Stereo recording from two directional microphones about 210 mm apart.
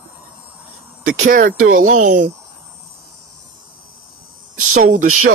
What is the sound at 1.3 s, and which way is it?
Speech, 40° right (ahead or behind).